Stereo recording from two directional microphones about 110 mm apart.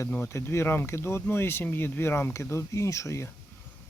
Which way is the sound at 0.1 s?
20° left (ahead or behind).